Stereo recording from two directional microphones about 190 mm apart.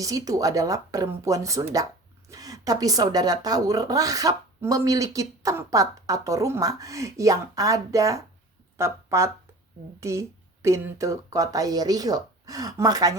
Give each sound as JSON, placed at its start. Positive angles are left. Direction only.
{"t": 0.0, "sound": "a woman's voice", "side_deg": -20}